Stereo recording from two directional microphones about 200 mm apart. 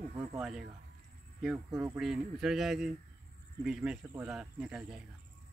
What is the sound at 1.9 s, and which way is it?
Speech, centre (ahead or behind).